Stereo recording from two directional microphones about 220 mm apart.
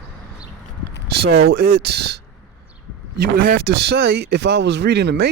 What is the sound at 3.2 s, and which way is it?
Speech, 45° right (ahead or behind).